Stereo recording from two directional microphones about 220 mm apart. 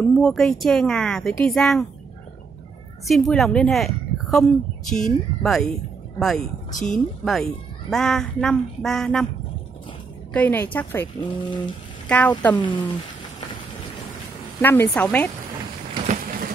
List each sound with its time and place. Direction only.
0.1 s a woman's voice: centre (ahead or behind)
3.1 s a woman's voice: centre (ahead or behind)
10.3 s a woman's voice: 10° left (ahead or behind)
11.1 s speech: 20° left (ahead or behind)
12.1 s a woman's voice: 5° left (ahead or behind)
12.5 s speech: 20° left (ahead or behind)
14.6 s a woman's voice: 10° left (ahead or behind)
16.1 s a sound: 40° right (ahead or behind)